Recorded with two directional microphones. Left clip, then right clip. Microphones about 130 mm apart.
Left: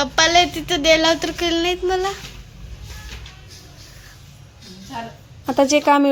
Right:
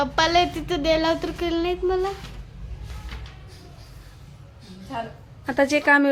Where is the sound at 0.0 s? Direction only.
Centre (ahead or behind).